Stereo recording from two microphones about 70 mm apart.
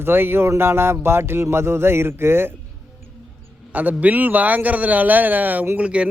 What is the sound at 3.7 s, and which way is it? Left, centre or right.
A man's voice, right.